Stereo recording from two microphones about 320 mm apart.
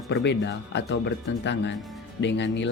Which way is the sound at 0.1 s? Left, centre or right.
Left.